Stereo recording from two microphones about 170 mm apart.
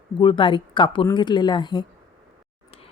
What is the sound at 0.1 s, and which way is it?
Speech, 30° left (ahead or behind).